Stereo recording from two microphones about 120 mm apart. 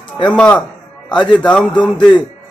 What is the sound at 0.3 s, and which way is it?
A man's voice, 10° left (ahead or behind).